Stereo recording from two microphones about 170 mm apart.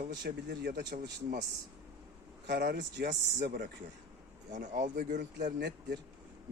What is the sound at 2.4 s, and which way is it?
Speech, 55° right (ahead or behind).